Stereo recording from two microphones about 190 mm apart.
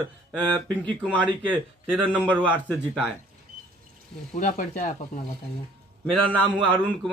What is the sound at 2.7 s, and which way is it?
Speech, 5° right (ahead or behind).